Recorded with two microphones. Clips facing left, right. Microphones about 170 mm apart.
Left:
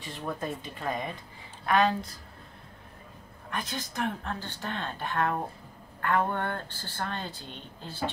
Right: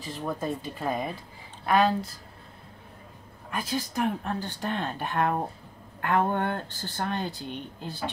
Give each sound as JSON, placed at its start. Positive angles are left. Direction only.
{"t": 0.3, "sound": "speech", "side_deg": 0}
{"t": 3.4, "sound": "speech", "side_deg": -10}